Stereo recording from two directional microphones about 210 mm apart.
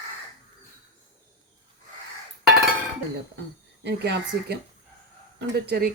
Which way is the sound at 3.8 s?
55° right (ahead or behind).